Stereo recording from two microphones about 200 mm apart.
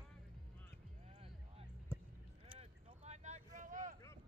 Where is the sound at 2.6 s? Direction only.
35° right (ahead or behind).